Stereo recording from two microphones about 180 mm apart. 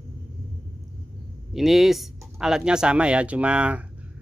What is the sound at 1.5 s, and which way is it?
Speech, centre (ahead or behind).